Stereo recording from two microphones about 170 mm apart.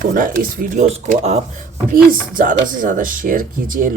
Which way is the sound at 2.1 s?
50° right (ahead or behind).